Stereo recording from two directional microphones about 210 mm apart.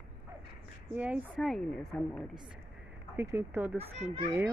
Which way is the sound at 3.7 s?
30° right (ahead or behind).